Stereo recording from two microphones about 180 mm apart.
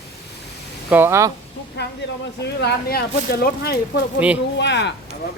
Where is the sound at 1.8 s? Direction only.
70° left (ahead or behind).